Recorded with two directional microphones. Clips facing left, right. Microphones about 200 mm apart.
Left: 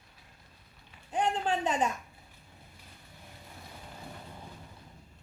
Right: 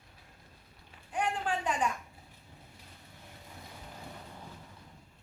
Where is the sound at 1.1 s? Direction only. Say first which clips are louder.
Left 3 dB; 25° left (ahead or behind).